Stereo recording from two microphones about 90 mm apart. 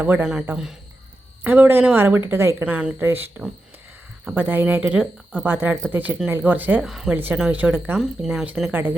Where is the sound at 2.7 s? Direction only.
15° right (ahead or behind).